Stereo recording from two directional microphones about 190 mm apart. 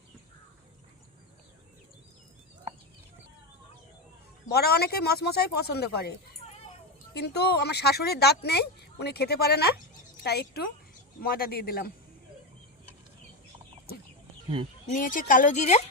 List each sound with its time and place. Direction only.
4.5 s speech: 55° left (ahead or behind)
14.9 s speech: 45° left (ahead or behind)